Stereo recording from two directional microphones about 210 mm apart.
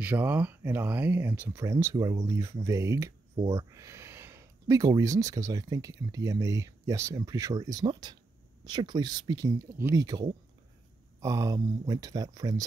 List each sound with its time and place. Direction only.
0.0 s speech: 10° right (ahead or behind)